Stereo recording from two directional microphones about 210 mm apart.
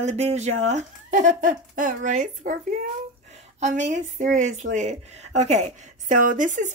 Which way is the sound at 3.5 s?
35° right (ahead or behind).